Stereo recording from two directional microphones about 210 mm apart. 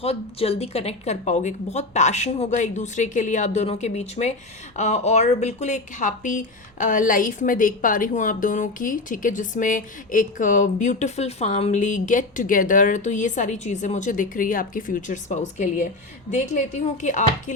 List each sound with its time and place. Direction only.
0.0 s speech: 30° left (ahead or behind)